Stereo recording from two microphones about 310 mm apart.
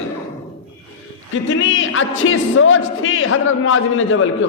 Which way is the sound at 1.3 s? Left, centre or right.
Left.